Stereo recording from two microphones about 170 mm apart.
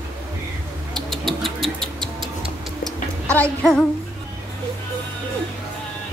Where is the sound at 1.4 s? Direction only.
Centre (ahead or behind).